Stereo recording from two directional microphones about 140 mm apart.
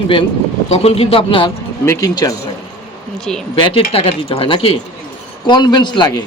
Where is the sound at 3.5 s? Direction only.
40° left (ahead or behind).